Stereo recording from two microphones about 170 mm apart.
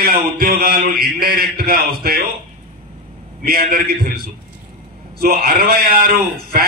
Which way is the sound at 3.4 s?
60° right (ahead or behind).